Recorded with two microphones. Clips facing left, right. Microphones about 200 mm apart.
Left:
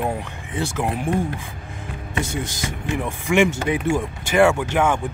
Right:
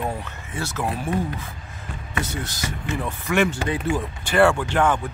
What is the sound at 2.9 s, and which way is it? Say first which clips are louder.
Speech: left 3 dB; 15° left (ahead or behind).